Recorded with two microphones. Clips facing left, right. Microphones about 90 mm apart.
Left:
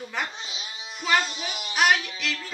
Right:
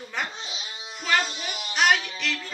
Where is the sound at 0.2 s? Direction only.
Centre (ahead or behind).